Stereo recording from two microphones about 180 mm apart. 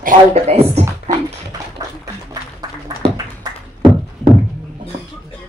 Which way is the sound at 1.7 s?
20° right (ahead or behind).